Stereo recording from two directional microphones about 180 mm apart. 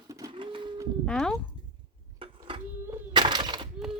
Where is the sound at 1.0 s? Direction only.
5° left (ahead or behind).